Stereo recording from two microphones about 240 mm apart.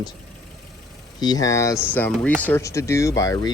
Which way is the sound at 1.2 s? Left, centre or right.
Centre.